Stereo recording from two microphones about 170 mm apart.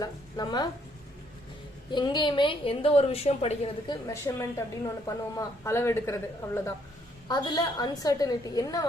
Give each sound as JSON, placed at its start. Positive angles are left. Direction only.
{"t": 0.0, "sound": "a woman's voice", "side_deg": 25}
{"t": 1.9, "sound": "a woman's voice", "side_deg": 25}
{"t": 3.8, "sound": "a woman's voice", "side_deg": 15}